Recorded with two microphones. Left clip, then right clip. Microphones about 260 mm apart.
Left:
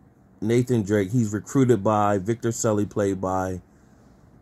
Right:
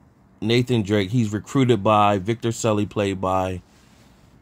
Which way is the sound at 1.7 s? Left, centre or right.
Right.